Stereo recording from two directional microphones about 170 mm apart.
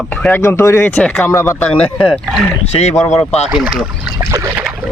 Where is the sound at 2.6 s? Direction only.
40° left (ahead or behind).